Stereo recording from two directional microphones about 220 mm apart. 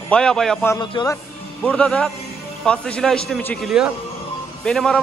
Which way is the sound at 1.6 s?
5° left (ahead or behind).